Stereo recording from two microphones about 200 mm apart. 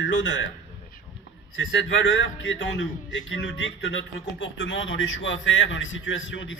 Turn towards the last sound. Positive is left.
turn(degrees=70)  # may be behind; listen again after turning